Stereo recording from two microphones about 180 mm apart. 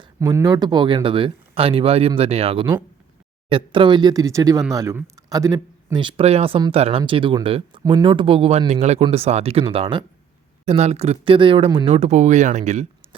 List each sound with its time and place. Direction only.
0.0 s speech: 20° right (ahead or behind); by 13.1 s 40° right (ahead or behind)